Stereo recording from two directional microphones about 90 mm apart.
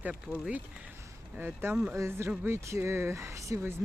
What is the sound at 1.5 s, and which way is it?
Speech, 10° right (ahead or behind).